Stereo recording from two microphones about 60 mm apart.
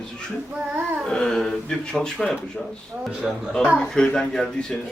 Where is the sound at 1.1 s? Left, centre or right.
Centre.